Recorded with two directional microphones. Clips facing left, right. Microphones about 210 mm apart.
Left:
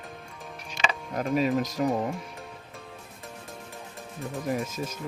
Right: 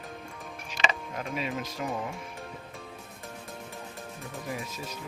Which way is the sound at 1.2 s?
45° left (ahead or behind).